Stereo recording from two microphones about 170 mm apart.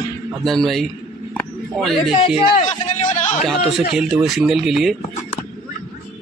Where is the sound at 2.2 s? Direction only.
35° left (ahead or behind).